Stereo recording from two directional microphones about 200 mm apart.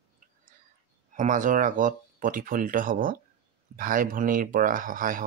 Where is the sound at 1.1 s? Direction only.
40° right (ahead or behind).